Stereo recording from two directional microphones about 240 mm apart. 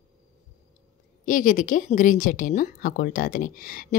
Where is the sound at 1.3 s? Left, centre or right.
Left.